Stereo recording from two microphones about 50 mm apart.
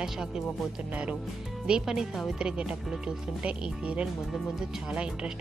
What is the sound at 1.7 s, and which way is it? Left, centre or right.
Speech, centre.